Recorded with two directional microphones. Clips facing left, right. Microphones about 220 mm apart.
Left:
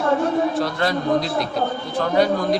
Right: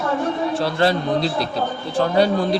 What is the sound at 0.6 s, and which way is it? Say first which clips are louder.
A man's voice: right 2 dB; 30° right (ahead or behind).